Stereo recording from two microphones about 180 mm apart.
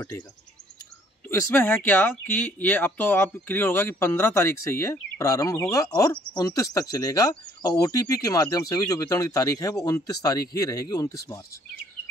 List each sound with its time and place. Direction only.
1.3 s speech: 10° left (ahead or behind)